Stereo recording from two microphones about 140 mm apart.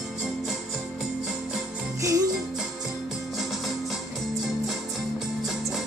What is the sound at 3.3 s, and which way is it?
Music, centre (ahead or behind).